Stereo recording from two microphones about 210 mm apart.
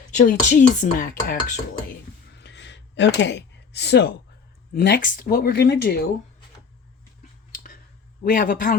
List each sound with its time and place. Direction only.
0.1 s speech: 35° left (ahead or behind)
2.3 s a sound: 55° left (ahead or behind)
4.7 s speech: 45° left (ahead or behind)
8.2 s speech: 40° left (ahead or behind)